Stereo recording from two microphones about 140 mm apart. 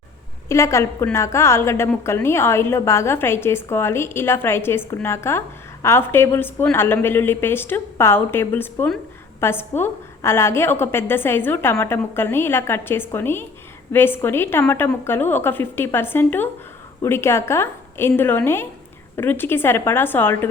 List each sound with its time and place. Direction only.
0.4 s a woman's voice: 20° left (ahead or behind)